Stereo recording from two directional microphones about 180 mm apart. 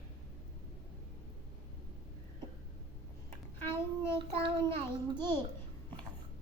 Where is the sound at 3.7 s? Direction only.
15° left (ahead or behind).